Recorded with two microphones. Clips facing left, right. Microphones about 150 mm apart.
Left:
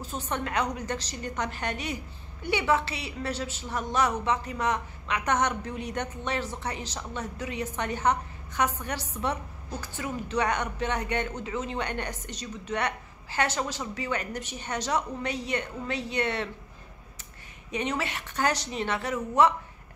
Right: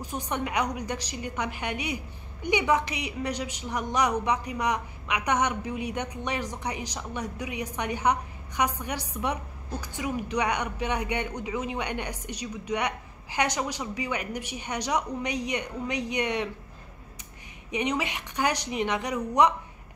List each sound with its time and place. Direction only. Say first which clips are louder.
0.0 s a woman's voice: right 1 dB; 15° right (ahead or behind)
17.6 s a woman's voice: right 2 dB; 15° right (ahead or behind)